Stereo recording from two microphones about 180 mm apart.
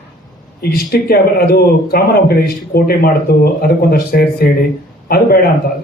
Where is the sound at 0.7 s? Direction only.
55° left (ahead or behind).